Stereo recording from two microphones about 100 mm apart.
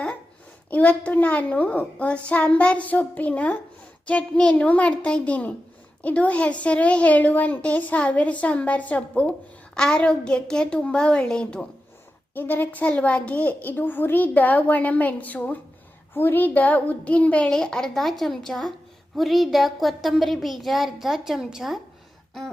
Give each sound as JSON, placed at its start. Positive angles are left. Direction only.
{"t": 0.7, "sound": "a woman's voice", "side_deg": 15}